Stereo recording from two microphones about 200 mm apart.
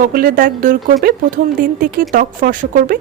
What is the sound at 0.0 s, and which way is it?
Speech, 45° right (ahead or behind).